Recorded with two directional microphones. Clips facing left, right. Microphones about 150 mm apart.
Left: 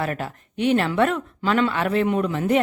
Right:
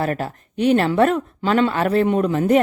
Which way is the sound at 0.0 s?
40° right (ahead or behind).